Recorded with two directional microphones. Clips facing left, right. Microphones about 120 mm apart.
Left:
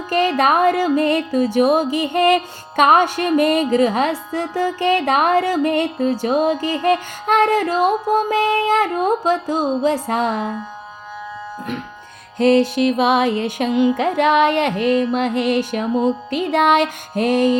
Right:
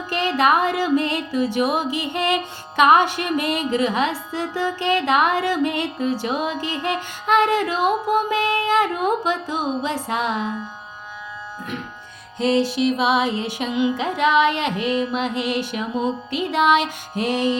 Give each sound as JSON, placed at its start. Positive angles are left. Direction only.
{"t": 0.1, "sound": "music", "side_deg": 45}
{"t": 12.4, "sound": "music", "side_deg": 55}